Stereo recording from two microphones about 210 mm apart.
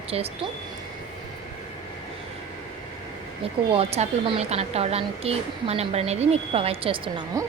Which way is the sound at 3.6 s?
30° right (ahead or behind).